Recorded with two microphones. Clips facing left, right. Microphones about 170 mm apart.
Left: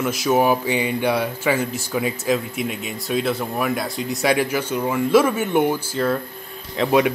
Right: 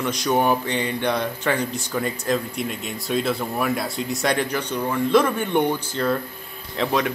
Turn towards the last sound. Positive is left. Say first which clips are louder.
# left 5 dB
turn(degrees=5)  # may be behind; listen again after turning